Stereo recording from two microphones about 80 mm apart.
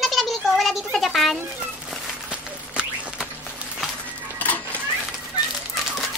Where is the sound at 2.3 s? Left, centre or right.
Centre.